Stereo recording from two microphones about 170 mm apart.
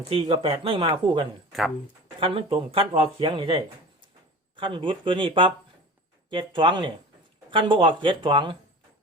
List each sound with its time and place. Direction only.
0.1 s speech: 35° right (ahead or behind)